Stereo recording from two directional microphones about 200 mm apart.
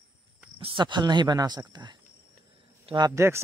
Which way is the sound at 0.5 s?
25° right (ahead or behind).